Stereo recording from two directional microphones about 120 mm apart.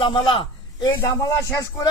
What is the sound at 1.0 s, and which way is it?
Speech, 30° left (ahead or behind).